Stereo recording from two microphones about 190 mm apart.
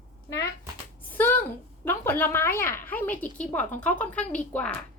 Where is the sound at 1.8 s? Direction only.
10° left (ahead or behind).